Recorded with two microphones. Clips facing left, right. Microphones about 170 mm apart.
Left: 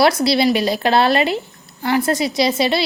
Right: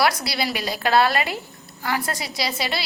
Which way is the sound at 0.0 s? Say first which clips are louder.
Left 8 dB; 25° left (ahead or behind).